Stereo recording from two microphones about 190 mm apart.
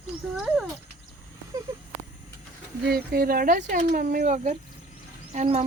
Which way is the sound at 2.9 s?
55° right (ahead or behind).